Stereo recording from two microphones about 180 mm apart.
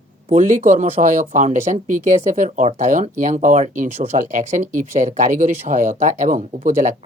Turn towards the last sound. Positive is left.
turn(degrees=-45)  # may be behind; listen again after turning